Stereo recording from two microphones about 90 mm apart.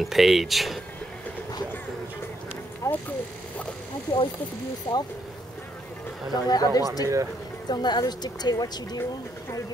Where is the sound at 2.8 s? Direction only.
35° left (ahead or behind).